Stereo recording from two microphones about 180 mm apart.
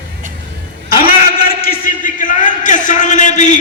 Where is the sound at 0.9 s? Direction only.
55° left (ahead or behind).